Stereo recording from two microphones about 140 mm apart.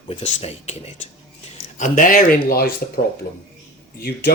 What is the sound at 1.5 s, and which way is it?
Speech, 65° left (ahead or behind).